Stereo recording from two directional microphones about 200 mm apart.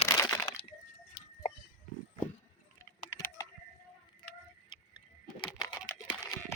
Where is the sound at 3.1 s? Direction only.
15° left (ahead or behind).